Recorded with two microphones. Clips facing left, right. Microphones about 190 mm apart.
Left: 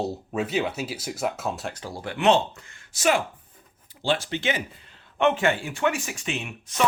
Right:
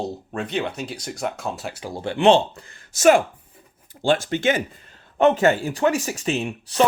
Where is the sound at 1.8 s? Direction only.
25° right (ahead or behind).